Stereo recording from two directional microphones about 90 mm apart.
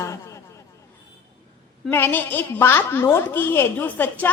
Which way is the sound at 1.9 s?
25° left (ahead or behind).